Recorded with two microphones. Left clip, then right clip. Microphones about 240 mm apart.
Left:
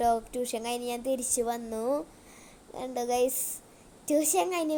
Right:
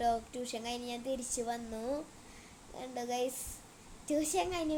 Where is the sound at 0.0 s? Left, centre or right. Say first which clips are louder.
Left 6 dB; left.